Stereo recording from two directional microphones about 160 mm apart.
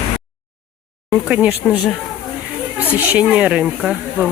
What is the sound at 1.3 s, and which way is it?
Speech, 10° right (ahead or behind).